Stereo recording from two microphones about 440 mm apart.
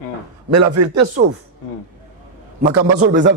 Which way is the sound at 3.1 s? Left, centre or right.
Right.